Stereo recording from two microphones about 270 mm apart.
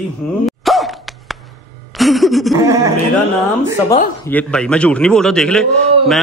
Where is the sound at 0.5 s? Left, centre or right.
Centre.